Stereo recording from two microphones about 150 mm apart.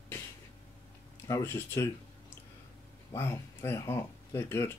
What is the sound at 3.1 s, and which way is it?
Speech, 20° left (ahead or behind).